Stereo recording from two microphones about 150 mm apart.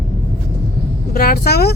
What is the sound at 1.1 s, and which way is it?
Speech, 90° left.